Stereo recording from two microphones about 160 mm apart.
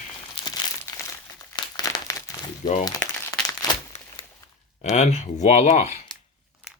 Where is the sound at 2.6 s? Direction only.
50° left (ahead or behind).